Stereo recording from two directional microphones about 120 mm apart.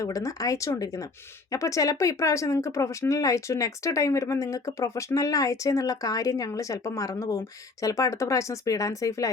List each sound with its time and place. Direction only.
0.0 s speech: 25° left (ahead or behind)